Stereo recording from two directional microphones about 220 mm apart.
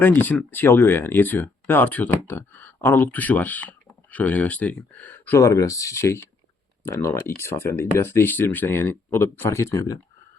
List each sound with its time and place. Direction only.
0.0 s speech: 10° left (ahead or behind)